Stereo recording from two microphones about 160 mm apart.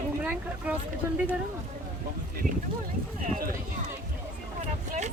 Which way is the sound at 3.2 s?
60° right (ahead or behind).